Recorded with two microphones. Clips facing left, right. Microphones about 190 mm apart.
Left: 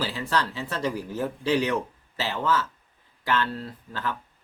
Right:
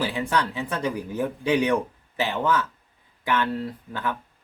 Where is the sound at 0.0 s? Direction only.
15° right (ahead or behind).